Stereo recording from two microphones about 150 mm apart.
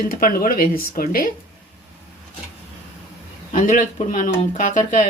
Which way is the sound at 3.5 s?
55° left (ahead or behind).